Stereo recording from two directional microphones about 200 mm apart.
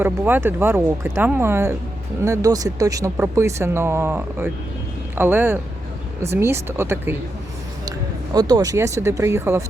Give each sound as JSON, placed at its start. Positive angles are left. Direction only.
{"t": 0.0, "sound": "speech", "side_deg": -10}